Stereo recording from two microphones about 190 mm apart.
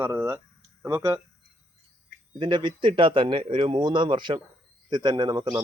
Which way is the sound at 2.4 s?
25° right (ahead or behind).